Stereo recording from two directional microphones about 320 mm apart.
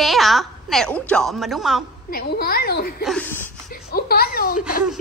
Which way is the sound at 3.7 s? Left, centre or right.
Left.